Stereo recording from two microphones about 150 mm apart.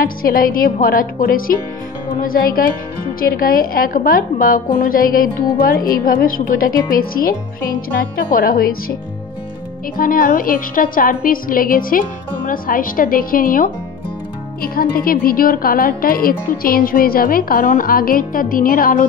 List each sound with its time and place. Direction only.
0.0 s speech: 75° left (ahead or behind)
9.9 s speech: 70° left (ahead or behind)